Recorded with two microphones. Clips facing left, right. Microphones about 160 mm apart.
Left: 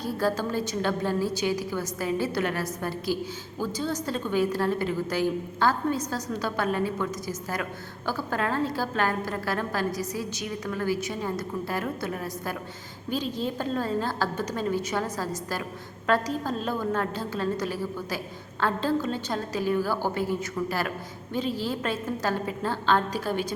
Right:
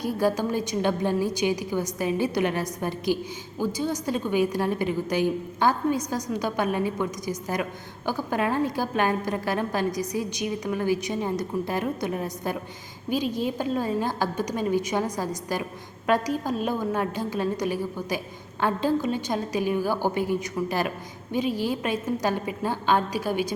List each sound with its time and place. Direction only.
0.0 s a woman's voice: 15° right (ahead or behind)